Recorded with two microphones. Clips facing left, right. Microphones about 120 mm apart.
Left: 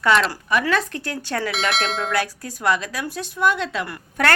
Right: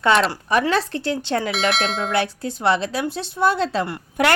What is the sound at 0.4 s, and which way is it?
A woman's voice, 30° right (ahead or behind).